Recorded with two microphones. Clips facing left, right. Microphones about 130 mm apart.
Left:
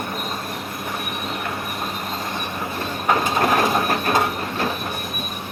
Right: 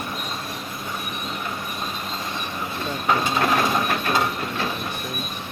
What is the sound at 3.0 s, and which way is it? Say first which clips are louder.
Mechanisms: left 2 dB; 45° left (ahead or behind).